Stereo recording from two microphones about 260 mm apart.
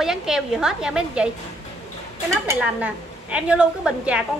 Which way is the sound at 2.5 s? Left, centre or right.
Centre.